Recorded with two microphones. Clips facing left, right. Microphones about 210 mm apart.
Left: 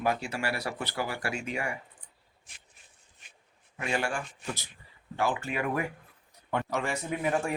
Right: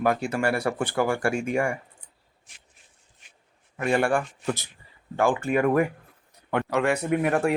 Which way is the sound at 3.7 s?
55° right (ahead or behind).